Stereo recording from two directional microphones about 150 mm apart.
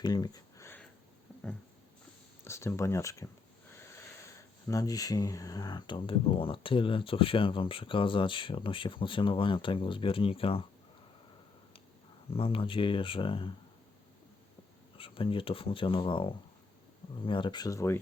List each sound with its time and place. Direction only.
0.0 s a sound: 25° left (ahead or behind)
1.3 s a sound: 10° left (ahead or behind)
2.4 s speech: 15° left (ahead or behind)
4.7 s speech: 25° left (ahead or behind)
12.3 s speech: 40° left (ahead or behind)
14.9 s speech: 35° left (ahead or behind); by 18.0 s 20° left (ahead or behind)